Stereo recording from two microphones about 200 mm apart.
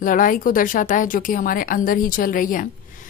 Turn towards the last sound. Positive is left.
turn(degrees=45)  # may be behind; listen again after turning